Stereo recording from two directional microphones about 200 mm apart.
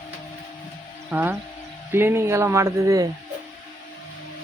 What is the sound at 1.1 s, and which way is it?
Speech, 10° right (ahead or behind).